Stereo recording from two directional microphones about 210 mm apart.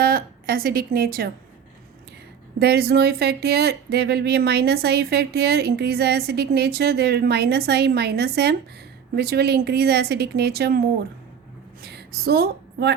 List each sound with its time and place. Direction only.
0.0 s speech: 45° right (ahead or behind)
2.6 s speech: 50° right (ahead or behind)
11.8 s a sound: 50° right (ahead or behind)